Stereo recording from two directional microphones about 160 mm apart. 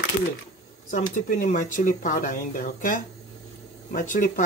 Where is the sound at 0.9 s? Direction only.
55° left (ahead or behind).